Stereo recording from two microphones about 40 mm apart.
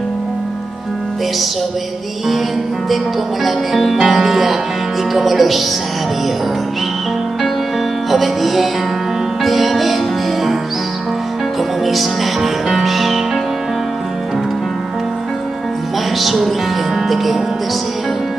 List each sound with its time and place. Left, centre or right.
3.4 s music: centre
8.1 s music: centre
11.8 s music: centre
16.2 s speech: centre
17.1 s music: centre